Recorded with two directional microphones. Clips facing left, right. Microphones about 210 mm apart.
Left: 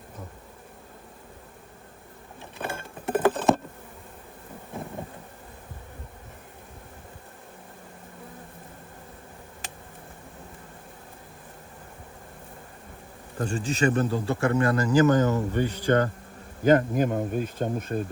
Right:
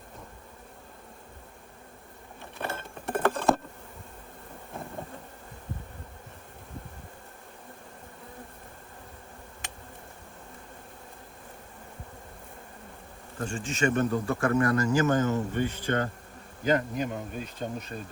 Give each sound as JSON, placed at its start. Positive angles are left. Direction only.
{"t": 2.6, "sound": "patter", "side_deg": 0}
{"t": 13.4, "sound": "speech", "side_deg": 35}